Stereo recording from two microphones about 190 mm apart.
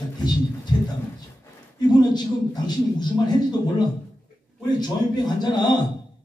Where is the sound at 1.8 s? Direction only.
20° left (ahead or behind).